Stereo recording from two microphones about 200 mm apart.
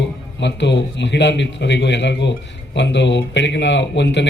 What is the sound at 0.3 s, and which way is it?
Speech, 60° left (ahead or behind).